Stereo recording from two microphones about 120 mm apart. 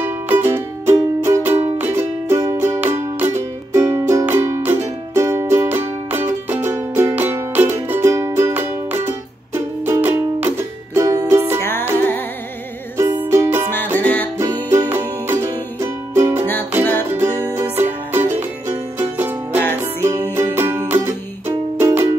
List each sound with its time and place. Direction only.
0.0 s music: 20° right (ahead or behind)
11.6 s music: 15° left (ahead or behind)
13.2 s music: 20° right (ahead or behind)
13.9 s music: 15° left (ahead or behind)
15.2 s music: 25° right (ahead or behind)